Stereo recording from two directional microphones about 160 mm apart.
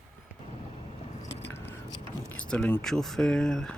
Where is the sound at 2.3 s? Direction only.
5° left (ahead or behind).